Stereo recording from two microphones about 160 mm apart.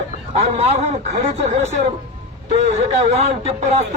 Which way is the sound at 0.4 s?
40° right (ahead or behind).